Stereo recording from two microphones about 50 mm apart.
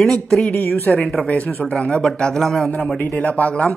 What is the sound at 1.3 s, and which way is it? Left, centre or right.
Speech, left.